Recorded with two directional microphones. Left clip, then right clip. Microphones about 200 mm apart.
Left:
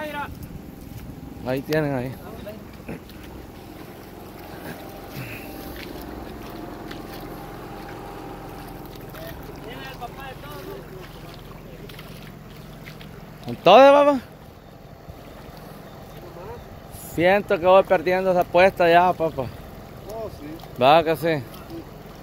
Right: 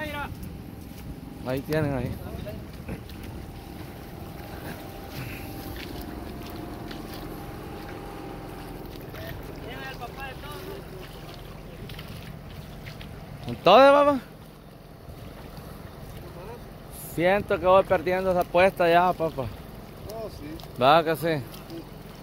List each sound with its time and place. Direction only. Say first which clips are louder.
1.4 s speech: left 4 dB; 20° left (ahead or behind)
13.5 s speech: left 4 dB; 15° left (ahead or behind)
17.1 s speech: left 4 dB; 25° left (ahead or behind)
20.8 s speech: left 3 dB; 5° left (ahead or behind)